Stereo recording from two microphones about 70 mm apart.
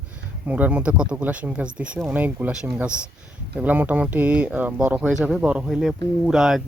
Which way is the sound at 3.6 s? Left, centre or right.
Right.